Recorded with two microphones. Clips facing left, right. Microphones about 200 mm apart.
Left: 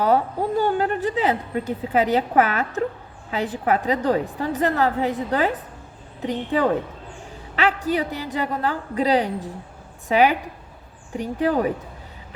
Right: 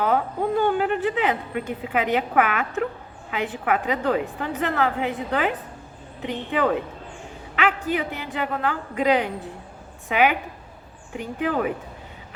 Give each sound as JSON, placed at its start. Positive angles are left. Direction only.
{"t": 0.6, "sound": "a woman's voice", "side_deg": 40}